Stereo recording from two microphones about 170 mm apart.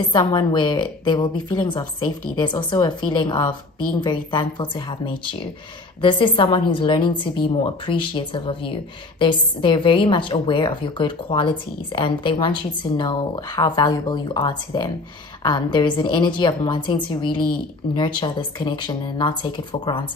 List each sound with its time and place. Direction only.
0.1 s a woman's voice: 25° left (ahead or behind)